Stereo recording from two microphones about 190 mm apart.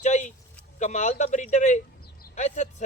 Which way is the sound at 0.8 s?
40° left (ahead or behind).